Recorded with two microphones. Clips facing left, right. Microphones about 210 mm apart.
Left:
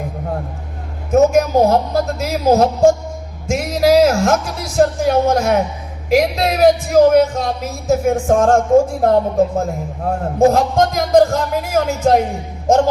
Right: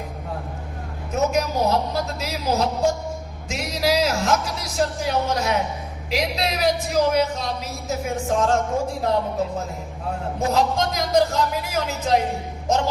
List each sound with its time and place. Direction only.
1.1 s a sound: 50° left (ahead or behind)
3.4 s music: 50° left (ahead or behind)
6.1 s speech: 50° left (ahead or behind)